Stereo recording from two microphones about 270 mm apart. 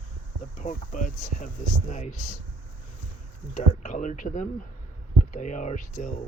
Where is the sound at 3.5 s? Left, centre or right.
Left.